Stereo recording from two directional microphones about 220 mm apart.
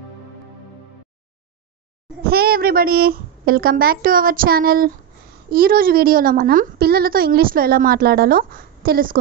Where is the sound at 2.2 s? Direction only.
45° right (ahead or behind).